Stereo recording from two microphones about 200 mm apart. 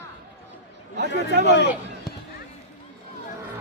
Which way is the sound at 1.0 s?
55° right (ahead or behind).